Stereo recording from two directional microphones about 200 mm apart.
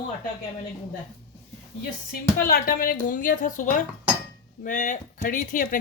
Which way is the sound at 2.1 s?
45° left (ahead or behind).